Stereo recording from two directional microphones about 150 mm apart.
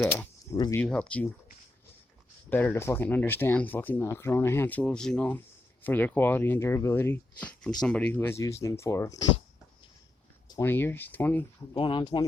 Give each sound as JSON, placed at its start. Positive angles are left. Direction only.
{"t": 0.5, "sound": "speech", "side_deg": 30}
{"t": 0.8, "sound": "speech", "side_deg": 5}
{"t": 2.5, "sound": "speech", "side_deg": 15}
{"t": 10.5, "sound": "speech", "side_deg": 15}
{"t": 11.7, "sound": "speech", "side_deg": 35}